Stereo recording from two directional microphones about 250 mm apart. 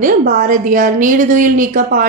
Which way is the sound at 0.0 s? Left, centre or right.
Right.